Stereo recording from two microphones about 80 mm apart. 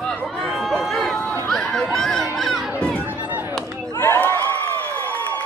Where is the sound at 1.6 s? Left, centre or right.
Centre.